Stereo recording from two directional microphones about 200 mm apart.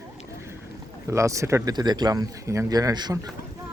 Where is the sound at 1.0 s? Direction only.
15° right (ahead or behind).